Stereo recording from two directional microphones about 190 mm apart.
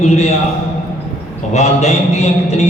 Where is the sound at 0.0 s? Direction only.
35° left (ahead or behind).